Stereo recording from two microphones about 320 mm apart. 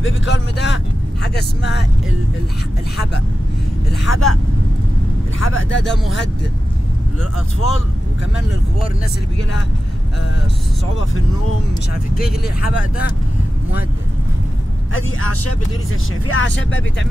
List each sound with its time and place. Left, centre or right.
0.0 s speech: left
3.9 s speech: left
5.4 s speech: left
7.6 s speech: left
15.0 s speech: left